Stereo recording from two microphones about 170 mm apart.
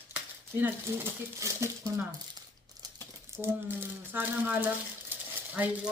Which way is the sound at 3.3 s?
15° right (ahead or behind).